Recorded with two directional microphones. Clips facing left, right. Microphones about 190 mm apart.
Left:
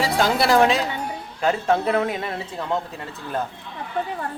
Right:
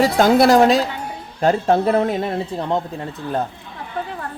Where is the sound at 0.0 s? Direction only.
45° right (ahead or behind); by 3.4 s 30° right (ahead or behind).